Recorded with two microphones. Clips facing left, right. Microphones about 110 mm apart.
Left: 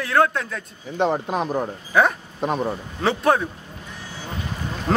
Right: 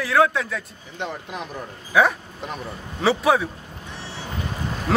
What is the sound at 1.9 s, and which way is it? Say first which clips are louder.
Speech: even; centre (ahead or behind).